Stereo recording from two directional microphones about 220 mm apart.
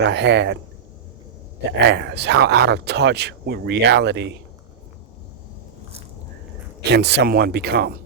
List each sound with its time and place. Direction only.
0.0 s speech: 50° right (ahead or behind)
1.9 s speech: 50° right (ahead or behind)
6.8 s speech: 50° right (ahead or behind)